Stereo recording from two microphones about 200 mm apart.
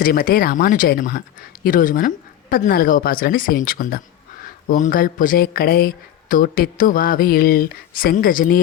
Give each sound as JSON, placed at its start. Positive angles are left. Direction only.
{"t": 0.0, "sound": "speech", "side_deg": 45}